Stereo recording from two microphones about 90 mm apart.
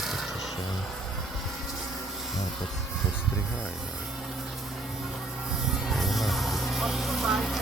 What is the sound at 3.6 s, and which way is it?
Music, 5° right (ahead or behind).